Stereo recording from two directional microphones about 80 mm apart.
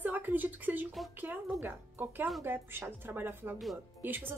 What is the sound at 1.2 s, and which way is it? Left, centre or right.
A woman's voice, right.